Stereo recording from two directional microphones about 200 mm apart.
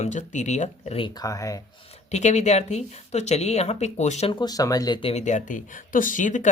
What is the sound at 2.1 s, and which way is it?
A woman's voice, 35° left (ahead or behind).